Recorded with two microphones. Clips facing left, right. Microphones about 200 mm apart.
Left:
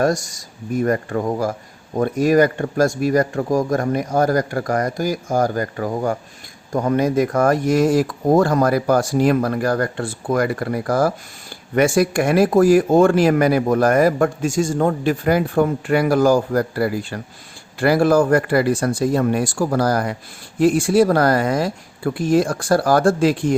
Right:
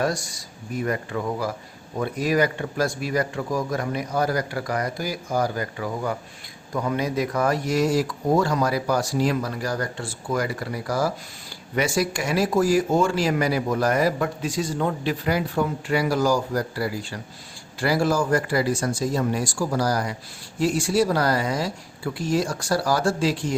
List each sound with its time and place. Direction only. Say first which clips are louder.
0.0 s speech: left 6 dB; 45° left (ahead or behind)